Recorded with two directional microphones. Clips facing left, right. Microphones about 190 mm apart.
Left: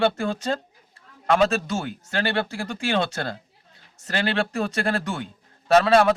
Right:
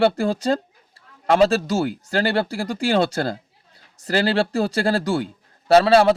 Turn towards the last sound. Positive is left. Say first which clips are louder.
# right 3 dB
turn(degrees=-30)  # may be behind; listen again after turning